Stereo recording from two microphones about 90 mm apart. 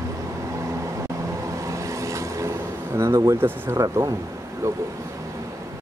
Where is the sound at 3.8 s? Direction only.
40° right (ahead or behind).